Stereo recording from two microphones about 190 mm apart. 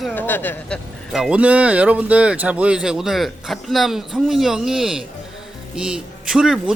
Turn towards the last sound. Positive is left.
turn(degrees=-5)  # may be behind; listen again after turning